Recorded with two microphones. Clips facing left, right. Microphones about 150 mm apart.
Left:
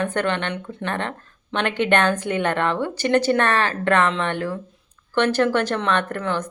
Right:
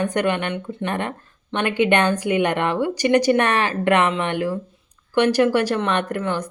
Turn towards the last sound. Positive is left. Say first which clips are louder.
# right 1 dB
turn(degrees=-10)  # may be behind; listen again after turning